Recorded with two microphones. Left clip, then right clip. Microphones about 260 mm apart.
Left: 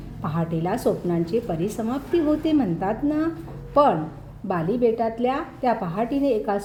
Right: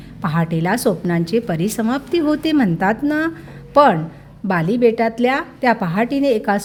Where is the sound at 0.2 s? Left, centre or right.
Right.